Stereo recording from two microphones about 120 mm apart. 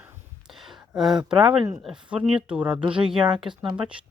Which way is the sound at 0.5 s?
Centre (ahead or behind).